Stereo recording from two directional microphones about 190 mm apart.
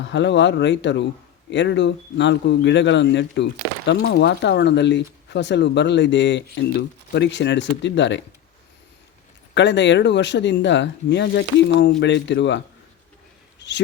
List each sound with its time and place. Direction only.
0.0 s speech: 70° left (ahead or behind)
9.6 s speech: 70° left (ahead or behind)